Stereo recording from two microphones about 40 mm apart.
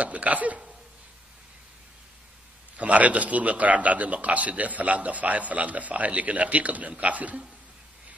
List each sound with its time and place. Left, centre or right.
0.0 s a man's voice: right
2.8 s a man's voice: right